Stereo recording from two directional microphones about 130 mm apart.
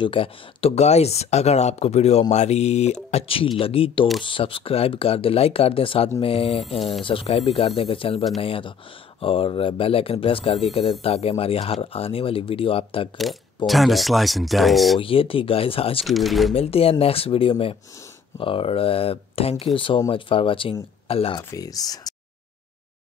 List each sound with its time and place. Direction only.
0.0 s speech: 45° left (ahead or behind)
13.7 s speech: centre (ahead or behind)
15.0 s speech: 45° left (ahead or behind)
16.1 s speech: centre (ahead or behind)
16.5 s speech: 50° left (ahead or behind)
21.4 s speech: 25° left (ahead or behind)